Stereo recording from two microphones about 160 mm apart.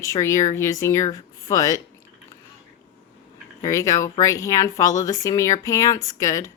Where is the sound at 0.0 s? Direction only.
20° left (ahead or behind).